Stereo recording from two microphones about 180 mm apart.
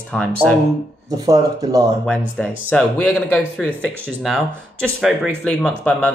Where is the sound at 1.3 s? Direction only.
20° right (ahead or behind).